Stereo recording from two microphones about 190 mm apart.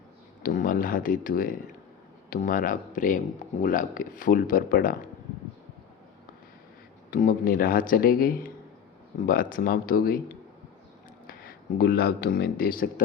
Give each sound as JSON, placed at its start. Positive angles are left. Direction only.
{"t": 0.4, "sound": "speech", "side_deg": 50}
{"t": 7.1, "sound": "speech", "side_deg": 45}
{"t": 11.3, "sound": "speech", "side_deg": 55}